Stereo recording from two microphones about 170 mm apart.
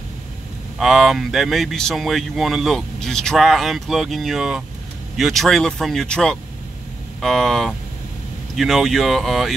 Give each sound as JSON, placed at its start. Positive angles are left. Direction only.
{"t": 0.7, "sound": "speech", "side_deg": 0}